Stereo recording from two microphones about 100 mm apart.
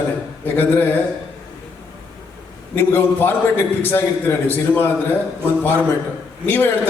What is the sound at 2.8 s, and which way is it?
A man's voice, 20° left (ahead or behind).